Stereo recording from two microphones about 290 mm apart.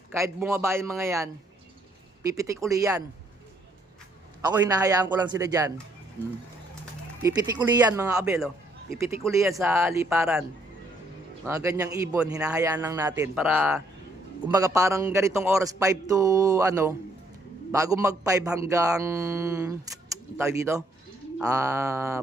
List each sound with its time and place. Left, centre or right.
0.1 s a man's voice: centre
4.5 s a man's voice: centre
7.2 s a man's voice: centre
11.4 s a man's voice: centre